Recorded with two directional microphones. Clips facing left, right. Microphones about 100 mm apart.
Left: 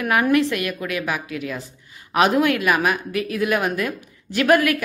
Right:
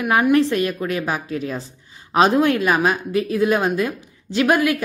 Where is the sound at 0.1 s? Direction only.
30° right (ahead or behind).